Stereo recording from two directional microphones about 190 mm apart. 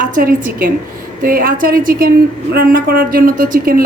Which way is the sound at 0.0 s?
45° right (ahead or behind).